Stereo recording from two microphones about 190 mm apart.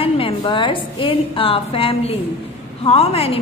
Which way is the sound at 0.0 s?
25° left (ahead or behind).